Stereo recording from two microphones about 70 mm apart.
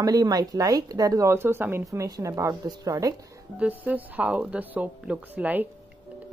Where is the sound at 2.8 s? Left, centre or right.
Right.